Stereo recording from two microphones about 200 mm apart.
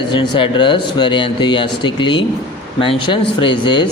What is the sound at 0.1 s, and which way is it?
A man's voice, 25° left (ahead or behind).